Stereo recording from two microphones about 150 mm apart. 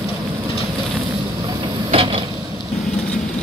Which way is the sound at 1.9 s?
40° right (ahead or behind).